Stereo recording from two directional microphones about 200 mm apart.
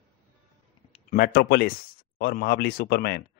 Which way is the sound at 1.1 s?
50° left (ahead or behind).